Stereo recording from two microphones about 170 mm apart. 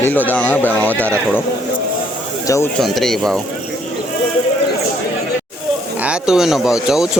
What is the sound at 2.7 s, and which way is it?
Speech, centre (ahead or behind).